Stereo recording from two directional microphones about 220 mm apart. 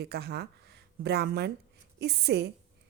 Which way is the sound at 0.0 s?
45° right (ahead or behind).